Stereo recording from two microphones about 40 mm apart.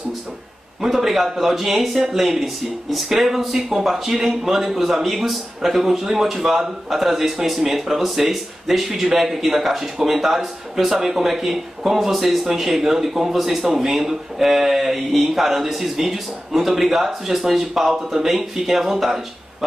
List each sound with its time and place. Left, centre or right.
0.7 s a man's voice: centre